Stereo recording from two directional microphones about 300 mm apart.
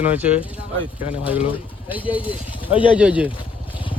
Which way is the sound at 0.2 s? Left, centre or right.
Centre.